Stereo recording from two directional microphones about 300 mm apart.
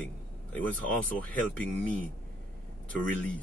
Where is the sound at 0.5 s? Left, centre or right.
Centre.